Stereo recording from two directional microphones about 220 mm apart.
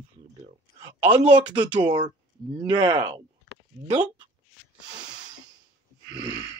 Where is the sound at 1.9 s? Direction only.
20° right (ahead or behind).